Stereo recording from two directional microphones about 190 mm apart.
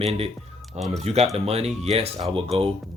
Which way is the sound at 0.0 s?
30° right (ahead or behind).